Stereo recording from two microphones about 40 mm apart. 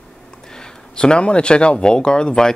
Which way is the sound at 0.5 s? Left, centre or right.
Centre.